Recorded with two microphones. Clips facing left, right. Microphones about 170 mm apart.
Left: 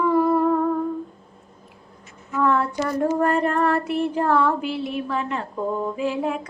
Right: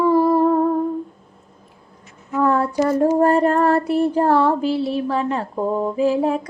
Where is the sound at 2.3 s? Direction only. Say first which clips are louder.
Right 4 dB; 35° right (ahead or behind).